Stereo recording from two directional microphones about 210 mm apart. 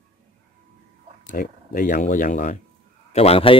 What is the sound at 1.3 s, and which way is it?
Speech, 40° left (ahead or behind).